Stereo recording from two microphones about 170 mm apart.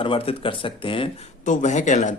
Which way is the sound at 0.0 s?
30° left (ahead or behind).